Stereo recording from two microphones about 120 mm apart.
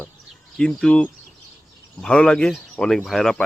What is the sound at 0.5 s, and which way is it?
Speech, 5° left (ahead or behind).